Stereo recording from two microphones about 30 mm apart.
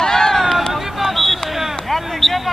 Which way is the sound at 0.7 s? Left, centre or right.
Centre.